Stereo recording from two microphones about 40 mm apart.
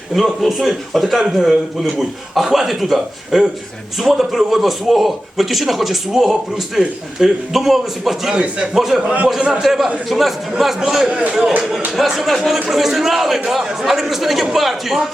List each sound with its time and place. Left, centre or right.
0.1 s a man's voice: centre
11.1 s a man's voice: right
11.9 s a man's voice: centre